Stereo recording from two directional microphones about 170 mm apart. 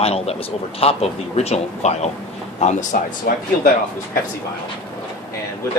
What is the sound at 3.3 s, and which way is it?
Speech, 60° left (ahead or behind).